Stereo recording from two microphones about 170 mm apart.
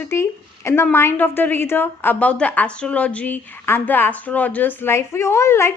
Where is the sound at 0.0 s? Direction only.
15° left (ahead or behind).